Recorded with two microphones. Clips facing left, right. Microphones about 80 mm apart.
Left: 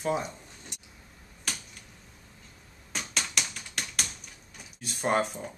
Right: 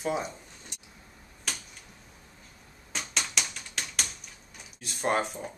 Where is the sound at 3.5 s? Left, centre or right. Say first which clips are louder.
Even; centre.